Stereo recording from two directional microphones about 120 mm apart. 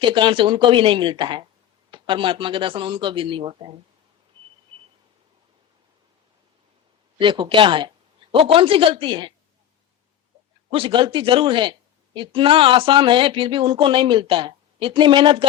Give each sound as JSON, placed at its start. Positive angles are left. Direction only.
{"t": 0.0, "sound": "speech", "side_deg": -40}
{"t": 4.4, "sound": "a sound", "side_deg": -40}
{"t": 7.2, "sound": "speech", "side_deg": -45}
{"t": 10.7, "sound": "speech", "side_deg": -45}